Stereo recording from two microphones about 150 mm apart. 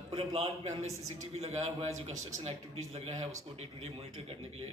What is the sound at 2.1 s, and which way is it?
Speech, 20° right (ahead or behind).